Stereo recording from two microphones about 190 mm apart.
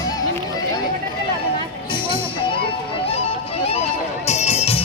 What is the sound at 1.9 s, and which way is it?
Music, 25° left (ahead or behind).